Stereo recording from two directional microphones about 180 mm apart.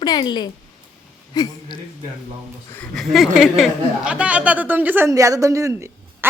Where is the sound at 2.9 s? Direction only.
Centre (ahead or behind).